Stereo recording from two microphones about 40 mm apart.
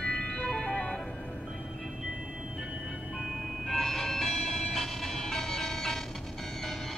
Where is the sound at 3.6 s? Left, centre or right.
Centre.